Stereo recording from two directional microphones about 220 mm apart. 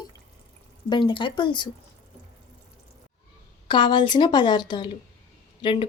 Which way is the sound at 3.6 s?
20° left (ahead or behind).